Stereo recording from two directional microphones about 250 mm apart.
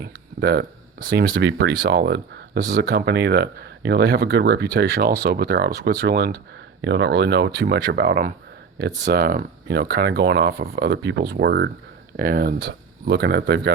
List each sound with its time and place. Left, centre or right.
0.0 s speech: right